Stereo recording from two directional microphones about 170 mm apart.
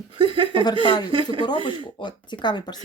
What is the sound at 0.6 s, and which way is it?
Speech, 25° left (ahead or behind).